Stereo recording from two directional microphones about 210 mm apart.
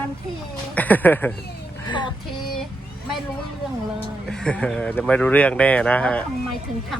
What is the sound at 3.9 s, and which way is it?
Speech, 5° left (ahead or behind).